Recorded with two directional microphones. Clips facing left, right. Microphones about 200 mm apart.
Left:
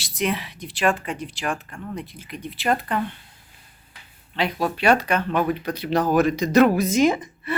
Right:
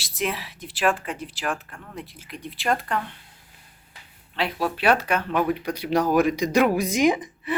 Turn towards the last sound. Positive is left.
turn(degrees=-15)  # may be behind; listen again after turning